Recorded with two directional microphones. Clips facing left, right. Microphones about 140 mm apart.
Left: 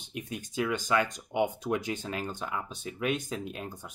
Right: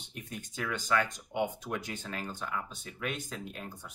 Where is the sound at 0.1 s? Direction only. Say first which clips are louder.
Left 6 dB; 15° left (ahead or behind).